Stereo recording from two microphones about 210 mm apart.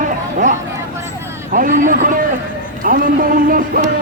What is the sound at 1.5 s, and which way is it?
A man's voice, 40° right (ahead or behind).